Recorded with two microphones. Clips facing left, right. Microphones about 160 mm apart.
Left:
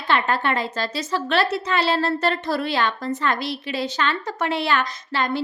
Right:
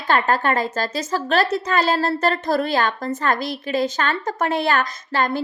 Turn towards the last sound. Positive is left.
turn(degrees=-45)  # may be behind; listen again after turning